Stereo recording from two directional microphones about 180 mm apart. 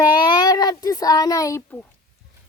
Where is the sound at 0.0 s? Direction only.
25° left (ahead or behind).